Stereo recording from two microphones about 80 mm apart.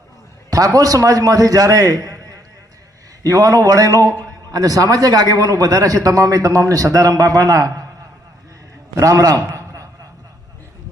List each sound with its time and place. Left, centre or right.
0.5 s a man's voice: right
9.0 s a man's voice: right